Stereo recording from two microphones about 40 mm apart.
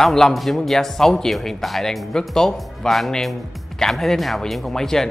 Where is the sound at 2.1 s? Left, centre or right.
Centre.